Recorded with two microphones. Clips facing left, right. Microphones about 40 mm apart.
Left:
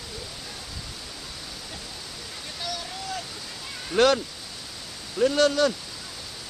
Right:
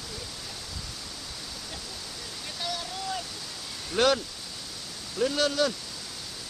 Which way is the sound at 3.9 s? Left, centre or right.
Centre.